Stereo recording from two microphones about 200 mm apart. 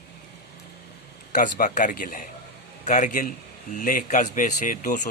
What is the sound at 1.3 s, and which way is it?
A man's voice, 40° left (ahead or behind).